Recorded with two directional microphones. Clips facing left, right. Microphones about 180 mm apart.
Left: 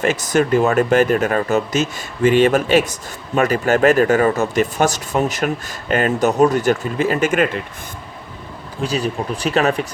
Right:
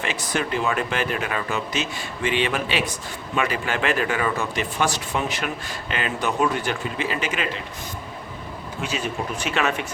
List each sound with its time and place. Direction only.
0.0 s speech: 45° left (ahead or behind)
8.8 s speech: 35° left (ahead or behind)